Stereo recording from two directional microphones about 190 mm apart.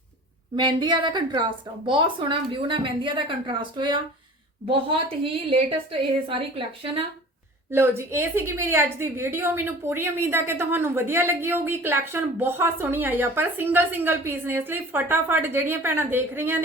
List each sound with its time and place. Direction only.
0.5 s a woman's voice: 25° right (ahead or behind)
7.7 s a woman's voice: 15° right (ahead or behind)